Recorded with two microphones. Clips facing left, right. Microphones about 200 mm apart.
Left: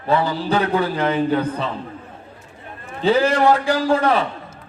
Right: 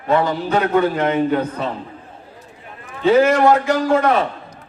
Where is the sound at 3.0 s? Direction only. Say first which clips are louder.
Right 3 dB; 30° left (ahead or behind).